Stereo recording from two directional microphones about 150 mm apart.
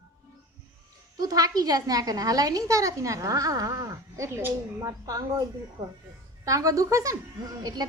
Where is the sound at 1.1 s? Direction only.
25° right (ahead or behind).